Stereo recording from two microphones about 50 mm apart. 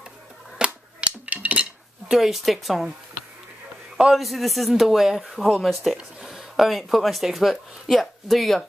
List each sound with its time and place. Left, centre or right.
0.6 s a sound: right
1.3 s dishes: right
2.0 s a man's voice: centre
3.9 s a man's voice: centre